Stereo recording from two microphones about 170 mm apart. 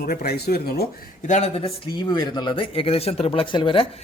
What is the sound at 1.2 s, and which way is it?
A man's voice, 40° left (ahead or behind).